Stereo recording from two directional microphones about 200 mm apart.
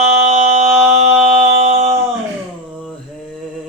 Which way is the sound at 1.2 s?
35° right (ahead or behind).